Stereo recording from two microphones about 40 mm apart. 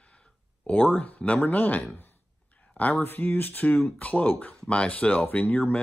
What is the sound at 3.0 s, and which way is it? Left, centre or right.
Speech, left.